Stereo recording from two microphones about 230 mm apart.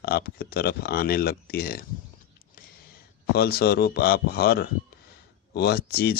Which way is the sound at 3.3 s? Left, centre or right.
Left.